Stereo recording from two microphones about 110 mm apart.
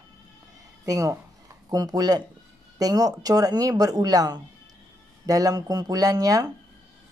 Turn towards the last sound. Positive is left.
turn(degrees=-35)  # may be behind; listen again after turning